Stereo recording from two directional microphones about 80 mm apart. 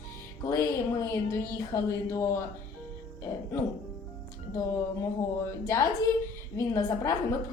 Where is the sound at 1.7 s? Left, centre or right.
Left.